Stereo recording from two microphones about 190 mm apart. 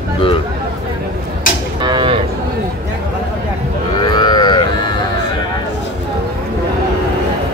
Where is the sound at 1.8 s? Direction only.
25° right (ahead or behind).